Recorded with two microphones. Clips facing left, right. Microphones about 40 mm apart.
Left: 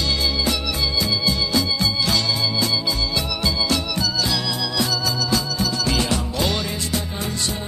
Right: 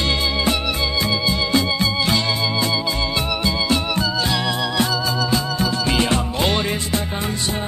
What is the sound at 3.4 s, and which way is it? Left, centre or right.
Music, right.